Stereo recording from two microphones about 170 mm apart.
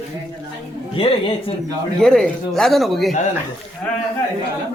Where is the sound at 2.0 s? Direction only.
5° left (ahead or behind).